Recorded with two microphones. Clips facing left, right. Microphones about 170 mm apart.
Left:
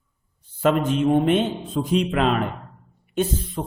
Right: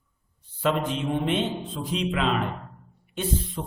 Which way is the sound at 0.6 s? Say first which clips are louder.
Left 6 dB; 50° left (ahead or behind).